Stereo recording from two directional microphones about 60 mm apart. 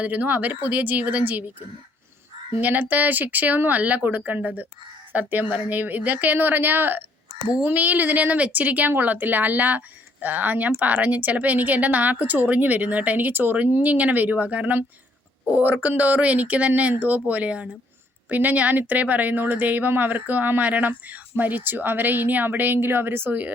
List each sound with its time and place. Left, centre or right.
0.0 s speech: right
2.6 s speech: right